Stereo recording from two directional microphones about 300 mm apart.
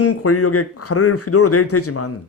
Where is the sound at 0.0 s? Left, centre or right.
Left.